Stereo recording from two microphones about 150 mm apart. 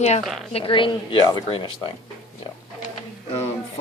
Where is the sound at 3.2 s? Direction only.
45° left (ahead or behind).